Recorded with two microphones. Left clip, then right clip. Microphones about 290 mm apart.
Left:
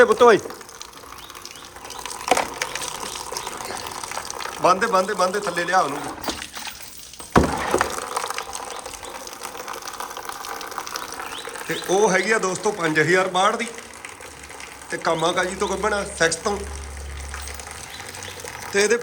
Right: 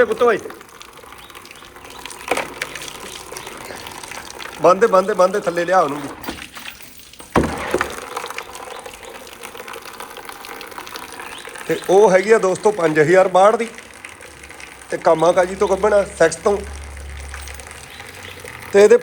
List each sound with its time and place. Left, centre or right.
0.0 s speech: left
2.0 s splinter: left
3.3 s water: centre
4.6 s speech: centre
7.7 s a sound: left
9.4 s water: centre
11.7 s speech: centre
15.0 s speech: centre
18.7 s speech: centre